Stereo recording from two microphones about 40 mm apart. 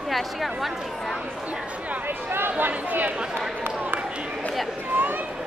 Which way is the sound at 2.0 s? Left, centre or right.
Right.